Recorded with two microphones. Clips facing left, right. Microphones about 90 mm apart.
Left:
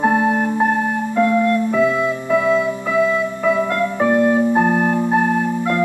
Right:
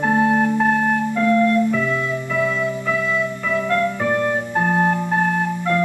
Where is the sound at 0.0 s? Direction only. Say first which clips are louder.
Left 2 dB; 20° left (ahead or behind).